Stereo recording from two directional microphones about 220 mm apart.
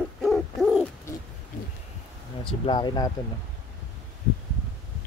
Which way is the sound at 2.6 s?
20° left (ahead or behind).